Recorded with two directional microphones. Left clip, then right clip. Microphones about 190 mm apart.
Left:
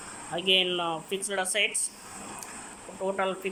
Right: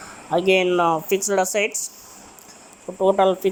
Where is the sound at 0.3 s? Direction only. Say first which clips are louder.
Right 8 dB; 25° right (ahead or behind).